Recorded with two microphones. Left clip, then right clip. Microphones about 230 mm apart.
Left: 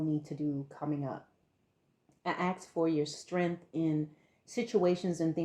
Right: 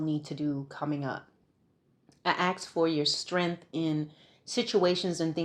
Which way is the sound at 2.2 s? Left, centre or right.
Right.